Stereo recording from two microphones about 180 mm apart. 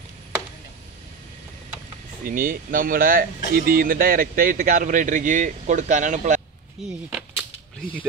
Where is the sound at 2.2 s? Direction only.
50° right (ahead or behind).